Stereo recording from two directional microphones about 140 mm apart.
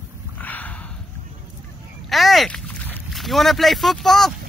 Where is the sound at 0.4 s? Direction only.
10° left (ahead or behind).